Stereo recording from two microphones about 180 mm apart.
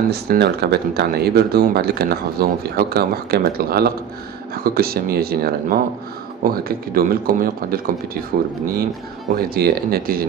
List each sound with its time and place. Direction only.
0.1 s speech: 65° right (ahead or behind)